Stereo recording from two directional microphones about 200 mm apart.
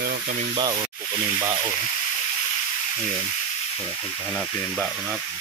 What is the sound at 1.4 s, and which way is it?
Frying, 15° right (ahead or behind).